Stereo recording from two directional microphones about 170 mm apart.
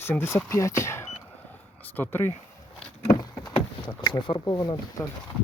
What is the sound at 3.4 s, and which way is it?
Speech, 20° left (ahead or behind).